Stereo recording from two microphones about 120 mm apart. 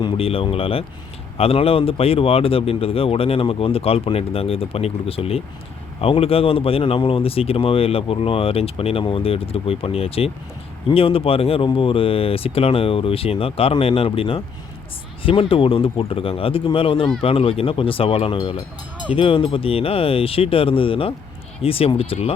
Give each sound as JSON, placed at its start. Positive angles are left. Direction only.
{"t": 0.2, "sound": "speech", "side_deg": 50}
{"t": 18.3, "sound": "speech", "side_deg": 35}
{"t": 19.1, "sound": "speech", "side_deg": 50}